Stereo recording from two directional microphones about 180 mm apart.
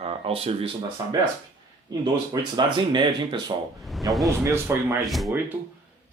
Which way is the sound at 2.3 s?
25° right (ahead or behind).